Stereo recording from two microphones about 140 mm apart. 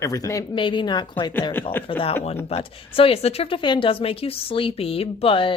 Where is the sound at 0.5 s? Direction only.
35° left (ahead or behind).